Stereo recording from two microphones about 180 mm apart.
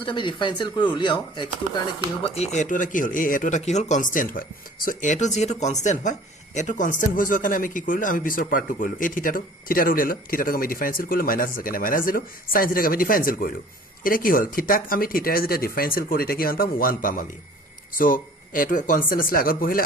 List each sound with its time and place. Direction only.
0.0 s speech: 25° left (ahead or behind)
2.3 s speech: 40° left (ahead or behind)